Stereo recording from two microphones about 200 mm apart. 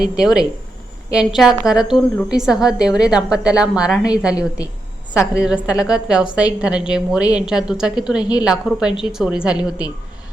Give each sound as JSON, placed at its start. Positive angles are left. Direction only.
{"t": 0.2, "sound": "a woman's voice", "side_deg": -5}
{"t": 4.4, "sound": "a woman's voice", "side_deg": 15}
{"t": 5.1, "sound": "a woman's voice", "side_deg": -5}
{"t": 8.2, "sound": "a woman's voice", "side_deg": 20}
{"t": 8.4, "sound": "a woman's voice", "side_deg": -5}